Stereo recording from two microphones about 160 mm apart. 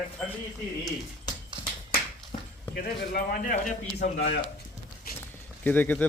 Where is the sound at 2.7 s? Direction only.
60° left (ahead or behind).